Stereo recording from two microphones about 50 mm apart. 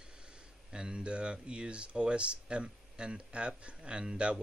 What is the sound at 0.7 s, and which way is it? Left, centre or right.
Speech, centre.